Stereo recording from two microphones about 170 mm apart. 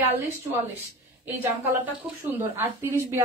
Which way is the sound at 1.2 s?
10° right (ahead or behind).